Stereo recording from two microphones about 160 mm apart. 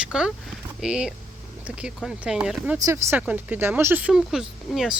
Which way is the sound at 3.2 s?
10° right (ahead or behind).